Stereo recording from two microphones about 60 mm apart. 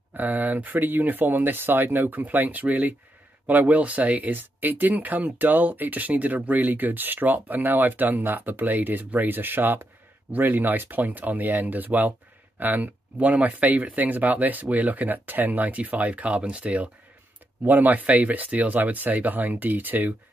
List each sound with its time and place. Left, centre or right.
0.1 s speech: right